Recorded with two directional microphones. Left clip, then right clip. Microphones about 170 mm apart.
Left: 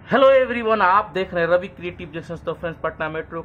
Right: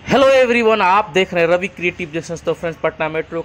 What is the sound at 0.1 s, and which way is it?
A man's voice, 30° right (ahead or behind).